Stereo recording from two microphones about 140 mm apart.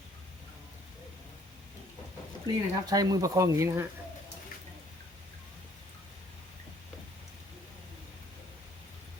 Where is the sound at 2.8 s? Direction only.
25° right (ahead or behind).